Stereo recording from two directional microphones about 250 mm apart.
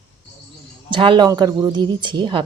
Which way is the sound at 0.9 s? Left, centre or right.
Centre.